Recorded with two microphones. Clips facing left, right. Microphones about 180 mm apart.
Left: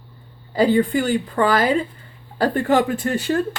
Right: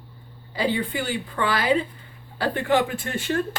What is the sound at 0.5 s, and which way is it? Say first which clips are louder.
A woman's voice: left 8 dB; 45° left (ahead or behind).